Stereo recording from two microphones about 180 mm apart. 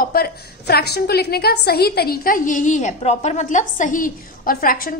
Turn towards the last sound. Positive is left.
turn(degrees=50)  # may be behind; listen again after turning